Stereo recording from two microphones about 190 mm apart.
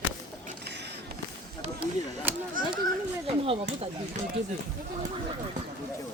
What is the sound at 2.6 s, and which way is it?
Speech, 45° right (ahead or behind).